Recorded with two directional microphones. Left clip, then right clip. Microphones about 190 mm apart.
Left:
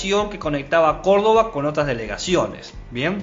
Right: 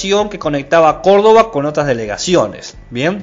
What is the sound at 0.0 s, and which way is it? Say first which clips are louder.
A man's voice: right 6 dB; 30° right (ahead or behind).